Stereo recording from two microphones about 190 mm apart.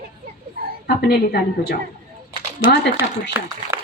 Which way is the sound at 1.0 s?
55° left (ahead or behind).